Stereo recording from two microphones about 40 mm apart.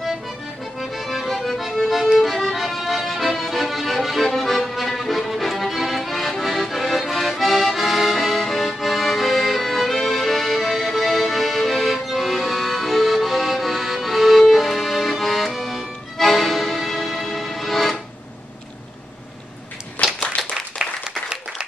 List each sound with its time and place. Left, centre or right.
0.7 s accordion: centre
20.0 s a sound: left
20.4 s applause: centre
20.8 s applause: centre